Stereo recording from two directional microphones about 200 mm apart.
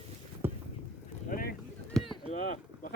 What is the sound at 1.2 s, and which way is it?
Boat, 45° left (ahead or behind).